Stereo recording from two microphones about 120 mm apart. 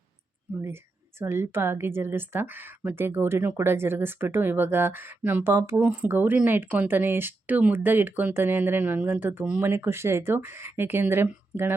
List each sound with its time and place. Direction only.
1.2 s a woman's voice: 20° right (ahead or behind)